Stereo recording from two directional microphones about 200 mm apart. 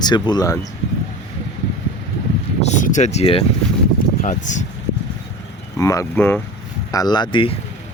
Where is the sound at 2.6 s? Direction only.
35° left (ahead or behind).